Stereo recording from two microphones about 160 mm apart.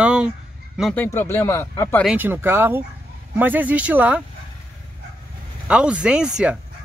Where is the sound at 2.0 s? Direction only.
10° right (ahead or behind).